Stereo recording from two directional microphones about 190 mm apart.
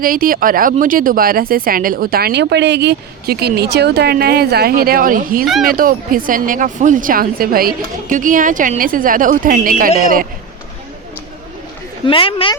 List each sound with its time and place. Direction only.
0.0 s speech: 50° right (ahead or behind)
12.0 s speech: 30° left (ahead or behind)